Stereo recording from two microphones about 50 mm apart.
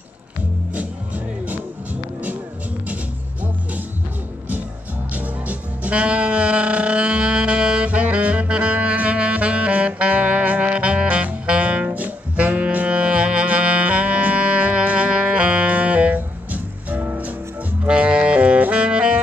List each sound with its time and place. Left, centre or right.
0.7 s music: right
5.1 s saxophone: right
17.8 s music: right
18.7 s saxophone: right